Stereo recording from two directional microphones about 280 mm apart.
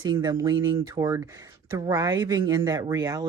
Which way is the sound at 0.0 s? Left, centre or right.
Centre.